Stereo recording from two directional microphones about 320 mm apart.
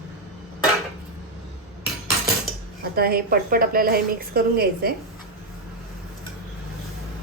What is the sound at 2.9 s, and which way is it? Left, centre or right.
A woman's voice, right.